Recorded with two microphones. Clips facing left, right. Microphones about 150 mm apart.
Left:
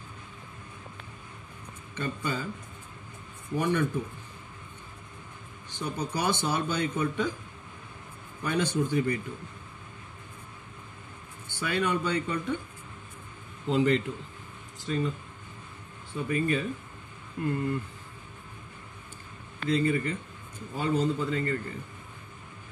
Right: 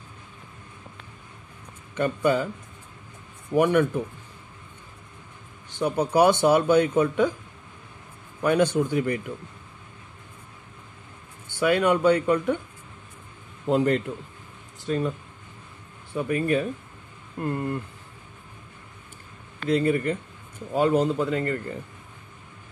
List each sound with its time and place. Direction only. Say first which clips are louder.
2.0 s speech: right 10 dB; 60° right (ahead or behind)
3.5 s speech: right 8 dB; 65° right (ahead or behind)
5.8 s speech: right 11 dB; 65° right (ahead or behind)
8.4 s speech: right 7 dB; 60° right (ahead or behind)
11.6 s speech: right 9 dB; 60° right (ahead or behind)
13.7 s a man's voice: right 3 dB; 50° right (ahead or behind)
14.9 s speech: right 4 dB; 60° right (ahead or behind)
19.7 s speech: right 4 dB; 60° right (ahead or behind)